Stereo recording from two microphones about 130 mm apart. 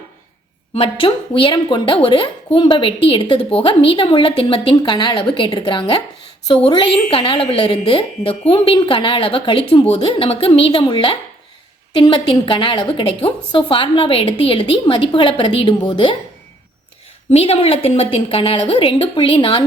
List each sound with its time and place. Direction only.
0.7 s a woman's voice: 45° left (ahead or behind)
17.3 s a woman's voice: 45° left (ahead or behind)